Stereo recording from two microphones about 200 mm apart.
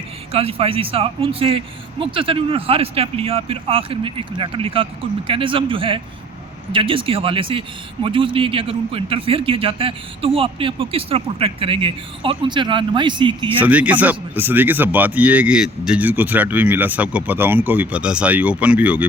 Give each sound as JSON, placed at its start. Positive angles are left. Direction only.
{"t": 0.3, "sound": "a man's voice", "side_deg": -30}
{"t": 13.6, "sound": "speech", "side_deg": -5}